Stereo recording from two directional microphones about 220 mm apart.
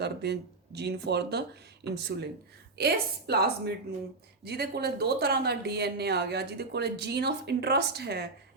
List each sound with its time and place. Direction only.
0.0 s speech: 50° right (ahead or behind)